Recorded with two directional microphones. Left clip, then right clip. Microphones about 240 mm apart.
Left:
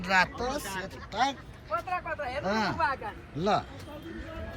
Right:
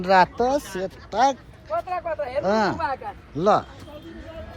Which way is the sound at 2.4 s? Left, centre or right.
Centre.